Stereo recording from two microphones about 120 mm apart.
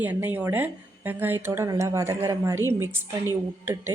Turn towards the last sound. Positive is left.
turn(degrees=-20)  # may be behind; listen again after turning